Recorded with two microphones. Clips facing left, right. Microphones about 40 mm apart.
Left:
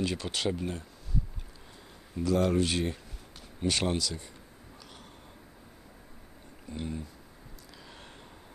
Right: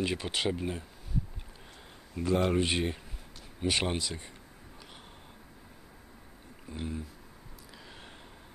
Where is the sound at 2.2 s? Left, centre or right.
Right.